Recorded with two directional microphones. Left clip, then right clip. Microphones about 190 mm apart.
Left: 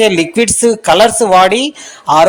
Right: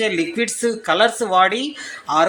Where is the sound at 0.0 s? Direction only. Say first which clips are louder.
Left 10 dB; 35° left (ahead or behind).